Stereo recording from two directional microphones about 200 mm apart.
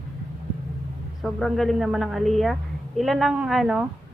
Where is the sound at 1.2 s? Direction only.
Centre (ahead or behind).